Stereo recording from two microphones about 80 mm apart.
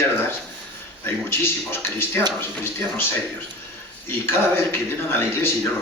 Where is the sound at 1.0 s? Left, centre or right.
Left.